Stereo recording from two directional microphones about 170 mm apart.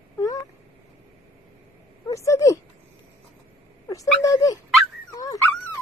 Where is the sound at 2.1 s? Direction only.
20° left (ahead or behind).